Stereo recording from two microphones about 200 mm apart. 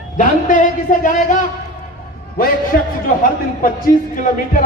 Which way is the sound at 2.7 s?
45° left (ahead or behind).